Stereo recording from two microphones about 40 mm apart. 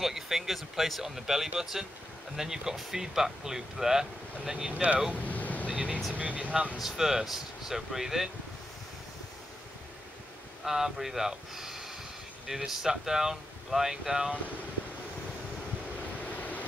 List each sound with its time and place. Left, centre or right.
0.0 s speech: centre
5.1 s vehicle: left
5.7 s vehicle: right
6.1 s speech: right
6.8 s speech: centre
10.6 s speech: centre
16.3 s vehicle: left